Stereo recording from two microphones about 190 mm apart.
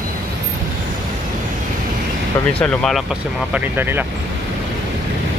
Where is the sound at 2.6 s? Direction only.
5° left (ahead or behind).